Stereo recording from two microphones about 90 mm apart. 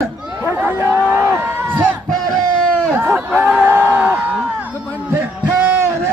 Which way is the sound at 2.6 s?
10° left (ahead or behind).